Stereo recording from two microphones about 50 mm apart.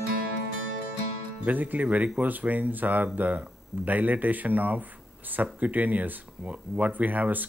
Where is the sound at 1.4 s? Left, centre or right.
Right.